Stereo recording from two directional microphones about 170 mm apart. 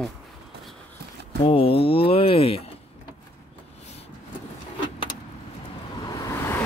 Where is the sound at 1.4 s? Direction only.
35° left (ahead or behind).